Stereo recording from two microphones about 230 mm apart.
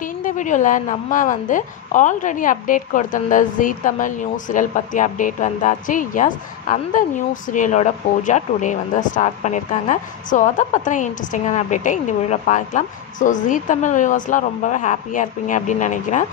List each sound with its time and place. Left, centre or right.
0.0 s a woman's voice: left